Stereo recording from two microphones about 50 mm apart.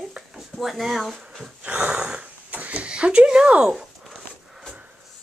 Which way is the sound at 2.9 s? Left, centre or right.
Right.